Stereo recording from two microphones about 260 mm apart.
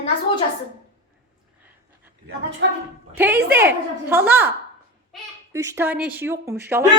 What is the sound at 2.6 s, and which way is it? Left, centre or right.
Speech, right.